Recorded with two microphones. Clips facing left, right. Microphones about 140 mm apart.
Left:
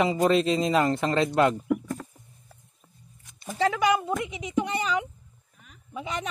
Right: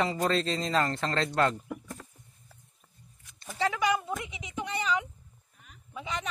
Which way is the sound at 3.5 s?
55° left (ahead or behind).